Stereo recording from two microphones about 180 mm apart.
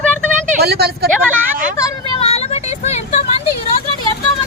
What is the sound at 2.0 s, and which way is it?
Vehicle, 30° left (ahead or behind).